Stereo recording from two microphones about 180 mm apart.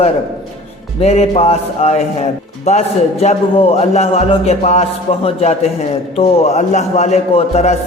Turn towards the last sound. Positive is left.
turn(degrees=40)  # may be behind; listen again after turning